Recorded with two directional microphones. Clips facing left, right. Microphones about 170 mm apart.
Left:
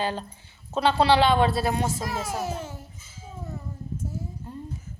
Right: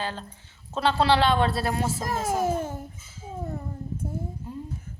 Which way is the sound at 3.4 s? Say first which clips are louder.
Right 3 dB; 55° right (ahead or behind).